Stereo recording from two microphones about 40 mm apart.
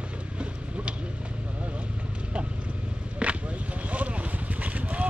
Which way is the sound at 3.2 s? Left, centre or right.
Right.